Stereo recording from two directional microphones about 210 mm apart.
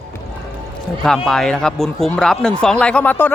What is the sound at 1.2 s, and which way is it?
Speech, centre (ahead or behind).